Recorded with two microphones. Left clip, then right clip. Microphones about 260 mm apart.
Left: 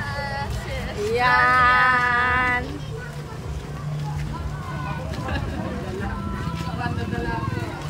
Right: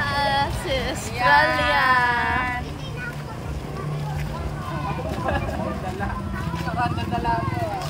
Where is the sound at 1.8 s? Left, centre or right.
Right.